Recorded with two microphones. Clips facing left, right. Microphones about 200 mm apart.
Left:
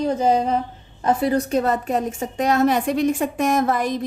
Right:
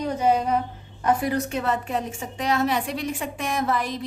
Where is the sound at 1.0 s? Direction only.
30° left (ahead or behind).